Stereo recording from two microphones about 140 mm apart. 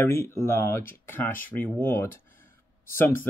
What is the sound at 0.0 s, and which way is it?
Speech, 15° left (ahead or behind).